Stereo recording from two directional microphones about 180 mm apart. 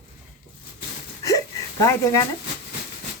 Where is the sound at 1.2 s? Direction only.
20° left (ahead or behind).